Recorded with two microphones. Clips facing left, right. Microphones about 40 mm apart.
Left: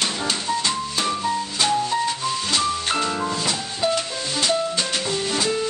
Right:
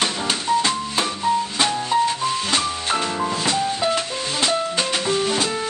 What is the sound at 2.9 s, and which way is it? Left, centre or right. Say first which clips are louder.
Music: right 1 dB; centre.